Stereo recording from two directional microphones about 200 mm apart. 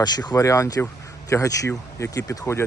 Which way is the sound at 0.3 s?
15° left (ahead or behind).